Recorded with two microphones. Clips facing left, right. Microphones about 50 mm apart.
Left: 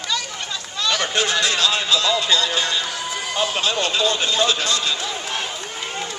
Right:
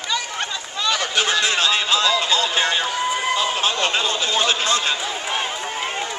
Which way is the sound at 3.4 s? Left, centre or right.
Right.